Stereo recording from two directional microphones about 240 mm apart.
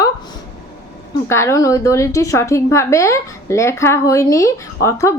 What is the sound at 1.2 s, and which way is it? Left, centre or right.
A woman's voice, centre.